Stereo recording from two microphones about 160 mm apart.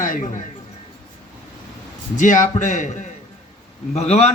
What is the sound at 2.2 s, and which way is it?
A man's voice, 50° left (ahead or behind).